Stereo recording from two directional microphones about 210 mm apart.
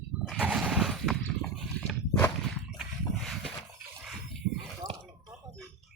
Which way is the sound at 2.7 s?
Centre (ahead or behind).